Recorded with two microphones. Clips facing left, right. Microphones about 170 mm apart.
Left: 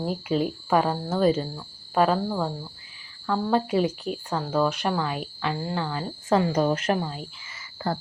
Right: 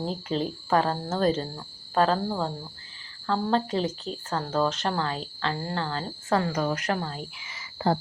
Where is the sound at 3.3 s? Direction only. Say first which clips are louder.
Left 2 dB; 10° left (ahead or behind).